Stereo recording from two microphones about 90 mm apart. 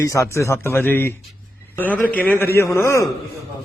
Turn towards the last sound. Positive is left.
turn(degrees=30)  # may be behind; listen again after turning